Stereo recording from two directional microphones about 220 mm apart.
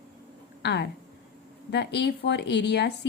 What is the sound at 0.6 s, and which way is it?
Speech, 50° left (ahead or behind).